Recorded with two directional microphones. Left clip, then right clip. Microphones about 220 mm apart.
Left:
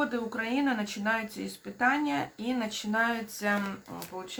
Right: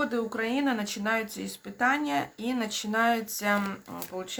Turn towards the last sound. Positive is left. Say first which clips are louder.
# right 3 dB
turn(degrees=-40)  # may be behind; listen again after turning